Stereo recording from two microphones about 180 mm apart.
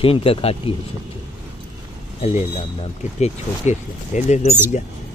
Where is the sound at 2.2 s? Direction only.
35° left (ahead or behind).